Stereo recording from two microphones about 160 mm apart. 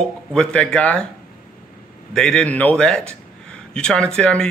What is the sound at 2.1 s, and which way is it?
Speech, 5° left (ahead or behind).